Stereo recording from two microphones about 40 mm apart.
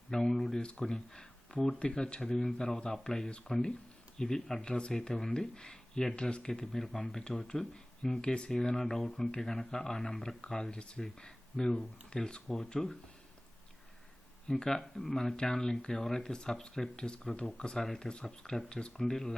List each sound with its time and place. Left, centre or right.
0.1 s speech: centre
0.6 s speech: left
12.8 s speech: centre
14.6 s speech: centre